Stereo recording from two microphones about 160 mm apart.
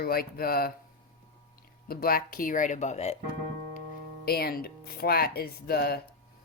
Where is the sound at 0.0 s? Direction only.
70° left (ahead or behind).